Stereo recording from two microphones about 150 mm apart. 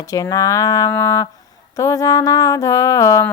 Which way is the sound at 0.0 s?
25° left (ahead or behind).